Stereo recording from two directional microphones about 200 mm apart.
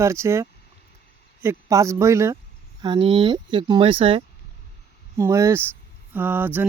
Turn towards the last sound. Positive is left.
turn(degrees=-10)  # may be behind; listen again after turning